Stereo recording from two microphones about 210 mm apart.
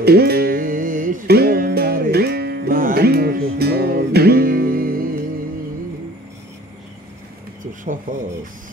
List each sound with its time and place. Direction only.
0.0 s music: 50° right (ahead or behind)
8.1 s speech: 40° right (ahead or behind)